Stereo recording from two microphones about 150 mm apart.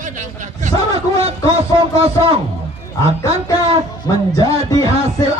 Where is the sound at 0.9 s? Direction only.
40° right (ahead or behind).